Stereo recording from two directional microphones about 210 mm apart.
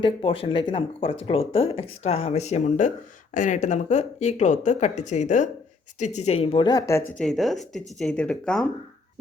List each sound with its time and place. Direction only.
0.0 s a woman's voice: 25° left (ahead or behind); by 8.6 s 5° left (ahead or behind)